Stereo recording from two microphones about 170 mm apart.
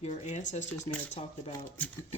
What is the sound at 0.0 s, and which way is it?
Speech, 45° left (ahead or behind).